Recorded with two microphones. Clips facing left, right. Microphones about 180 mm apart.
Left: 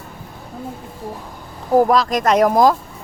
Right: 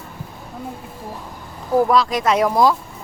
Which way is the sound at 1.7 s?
45° left (ahead or behind).